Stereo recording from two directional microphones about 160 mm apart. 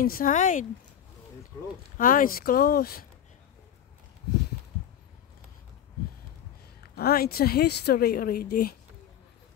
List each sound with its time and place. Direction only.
0.0 s speech: 65° left (ahead or behind)
2.0 s speech: 60° left (ahead or behind)
7.0 s a woman's voice: 75° left (ahead or behind)